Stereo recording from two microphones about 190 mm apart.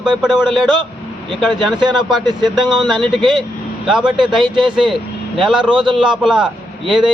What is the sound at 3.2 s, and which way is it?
Speech, 25° right (ahead or behind).